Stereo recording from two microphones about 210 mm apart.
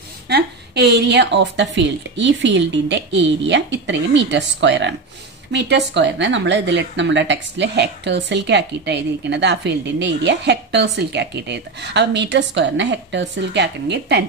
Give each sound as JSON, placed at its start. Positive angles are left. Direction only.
{"t": 0.3, "sound": "speech", "side_deg": -50}